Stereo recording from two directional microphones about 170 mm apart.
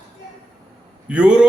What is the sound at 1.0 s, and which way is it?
Speech, 5° right (ahead or behind).